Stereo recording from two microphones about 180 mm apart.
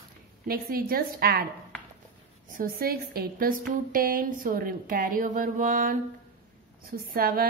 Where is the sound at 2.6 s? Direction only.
55° right (ahead or behind).